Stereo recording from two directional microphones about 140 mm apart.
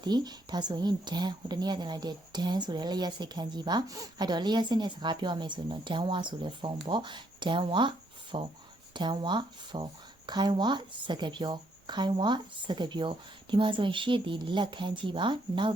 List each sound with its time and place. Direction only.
0.0 s speech: 30° right (ahead or behind)